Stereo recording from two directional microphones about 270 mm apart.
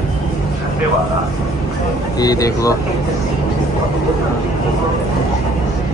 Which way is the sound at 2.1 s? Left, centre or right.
Centre.